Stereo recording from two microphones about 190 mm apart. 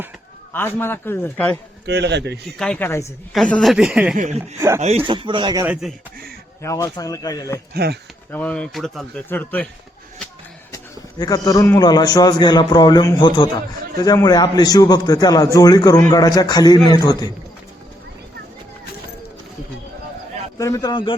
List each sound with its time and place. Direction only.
0.5 s speech: 10° left (ahead or behind)
1.9 s a man's voice: 65° right (ahead or behind)
2.6 s speech: 5° left (ahead or behind)
4.1 s speech: 40° right (ahead or behind)
4.8 s speech: 30° right (ahead or behind)
5.6 s speech: 5° right (ahead or behind)
6.6 s speech: 15° left (ahead or behind)
7.7 s a man's voice: 55° right (ahead or behind)
8.3 s speech: 5° left (ahead or behind)
11.2 s a man's voice: 20° left (ahead or behind)
20.6 s a man's voice: 20° left (ahead or behind)